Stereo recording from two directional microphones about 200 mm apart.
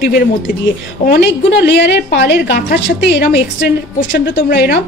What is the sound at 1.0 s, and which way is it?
A woman's voice, 60° left (ahead or behind).